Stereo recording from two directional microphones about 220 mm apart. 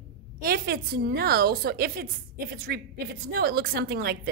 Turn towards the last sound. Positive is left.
turn(degrees=-45)  # may be behind; listen again after turning